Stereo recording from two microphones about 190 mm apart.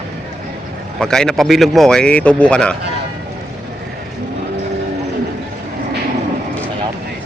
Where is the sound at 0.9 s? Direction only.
5° left (ahead or behind).